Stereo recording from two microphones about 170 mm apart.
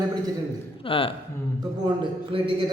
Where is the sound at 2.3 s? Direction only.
30° right (ahead or behind).